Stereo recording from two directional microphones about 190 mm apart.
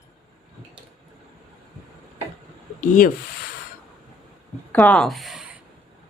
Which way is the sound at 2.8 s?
40° left (ahead or behind).